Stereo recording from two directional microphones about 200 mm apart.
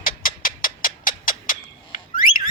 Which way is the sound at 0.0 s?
40° left (ahead or behind).